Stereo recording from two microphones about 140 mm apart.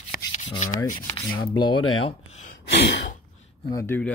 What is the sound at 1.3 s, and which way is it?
Speech, 35° left (ahead or behind).